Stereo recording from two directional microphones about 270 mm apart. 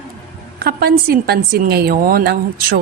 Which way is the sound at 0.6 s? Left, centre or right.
Right.